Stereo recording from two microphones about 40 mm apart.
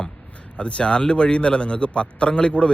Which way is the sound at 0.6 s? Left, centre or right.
Left.